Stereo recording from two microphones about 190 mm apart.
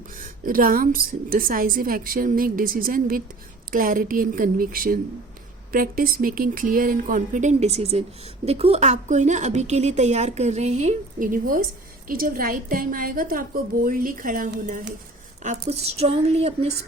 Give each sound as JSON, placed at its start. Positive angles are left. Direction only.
{"t": 0.2, "sound": "a woman's voice", "side_deg": -45}